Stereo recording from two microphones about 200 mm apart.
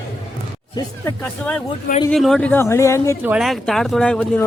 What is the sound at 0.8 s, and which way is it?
Speech, 10° left (ahead or behind).